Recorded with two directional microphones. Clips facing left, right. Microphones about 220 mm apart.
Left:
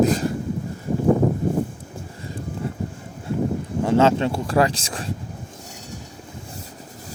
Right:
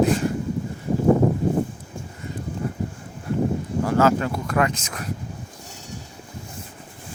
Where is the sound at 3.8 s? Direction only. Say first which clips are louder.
Left 2 dB; 25° left (ahead or behind).